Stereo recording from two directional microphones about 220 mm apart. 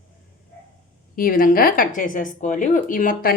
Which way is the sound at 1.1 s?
40° left (ahead or behind).